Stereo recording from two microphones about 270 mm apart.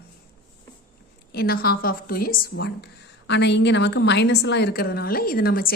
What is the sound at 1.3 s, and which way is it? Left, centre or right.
A woman's voice, left.